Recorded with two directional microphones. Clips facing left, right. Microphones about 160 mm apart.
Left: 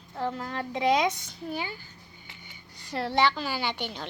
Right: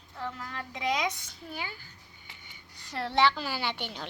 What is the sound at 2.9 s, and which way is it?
Speech, 10° left (ahead or behind).